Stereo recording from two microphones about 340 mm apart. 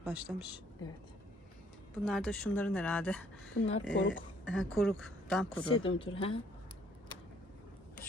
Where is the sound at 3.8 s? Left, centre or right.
Left.